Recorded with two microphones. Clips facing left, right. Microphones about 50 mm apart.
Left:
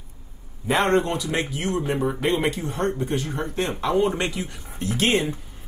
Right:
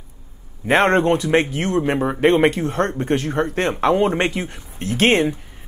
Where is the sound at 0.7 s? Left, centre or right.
Right.